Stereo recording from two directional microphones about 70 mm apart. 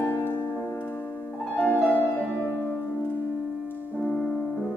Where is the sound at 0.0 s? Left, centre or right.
Left.